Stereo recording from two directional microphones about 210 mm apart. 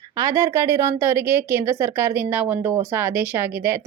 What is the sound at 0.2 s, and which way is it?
Speech, 15° right (ahead or behind).